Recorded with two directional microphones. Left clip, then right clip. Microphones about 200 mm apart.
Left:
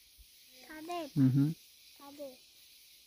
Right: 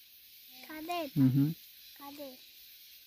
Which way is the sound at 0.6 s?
60° right (ahead or behind).